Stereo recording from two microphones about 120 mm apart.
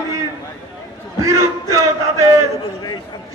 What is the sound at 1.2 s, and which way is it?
A man's voice, 25° right (ahead or behind).